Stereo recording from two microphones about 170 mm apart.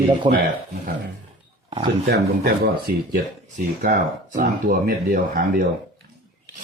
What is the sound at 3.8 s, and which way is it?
Speech, 50° right (ahead or behind).